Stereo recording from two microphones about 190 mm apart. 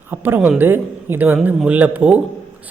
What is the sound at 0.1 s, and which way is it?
Speech, 10° right (ahead or behind).